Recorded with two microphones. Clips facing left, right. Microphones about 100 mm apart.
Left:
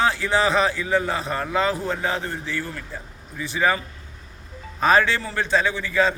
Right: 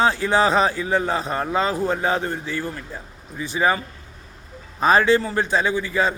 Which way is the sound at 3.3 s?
25° right (ahead or behind).